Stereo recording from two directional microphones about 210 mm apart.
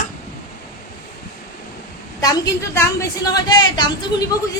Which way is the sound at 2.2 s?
20° left (ahead or behind).